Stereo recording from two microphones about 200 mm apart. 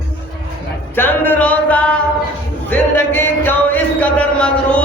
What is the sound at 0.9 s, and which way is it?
Music, 10° left (ahead or behind).